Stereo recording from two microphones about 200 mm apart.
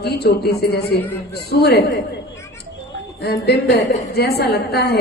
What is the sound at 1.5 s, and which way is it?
Speech, 50° left (ahead or behind).